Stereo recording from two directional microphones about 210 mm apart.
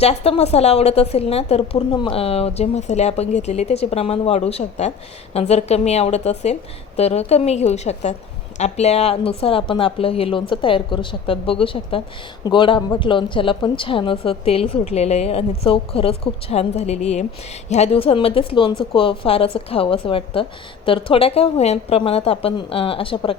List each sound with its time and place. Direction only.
0.0 s a woman's voice: 30° left (ahead or behind)